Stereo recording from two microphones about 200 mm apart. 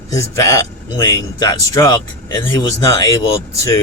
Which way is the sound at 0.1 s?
15° left (ahead or behind).